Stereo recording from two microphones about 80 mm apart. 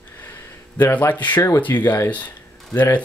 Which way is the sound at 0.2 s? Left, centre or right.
Left.